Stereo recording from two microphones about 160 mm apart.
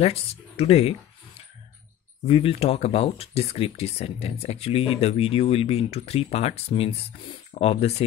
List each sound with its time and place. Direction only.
0.0 s speech: 40° left (ahead or behind)
2.2 s speech: 35° left (ahead or behind)